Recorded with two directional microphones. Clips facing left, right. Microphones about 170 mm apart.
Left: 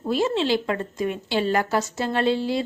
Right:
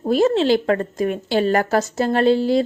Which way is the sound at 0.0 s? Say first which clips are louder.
Right 6 dB; 45° right (ahead or behind).